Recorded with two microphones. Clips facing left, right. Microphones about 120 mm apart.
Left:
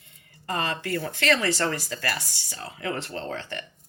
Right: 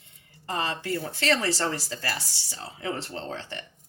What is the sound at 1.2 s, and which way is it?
Speech, 30° right (ahead or behind).